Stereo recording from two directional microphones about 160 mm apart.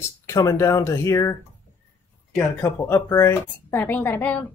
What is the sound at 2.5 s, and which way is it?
Speech, 10° left (ahead or behind).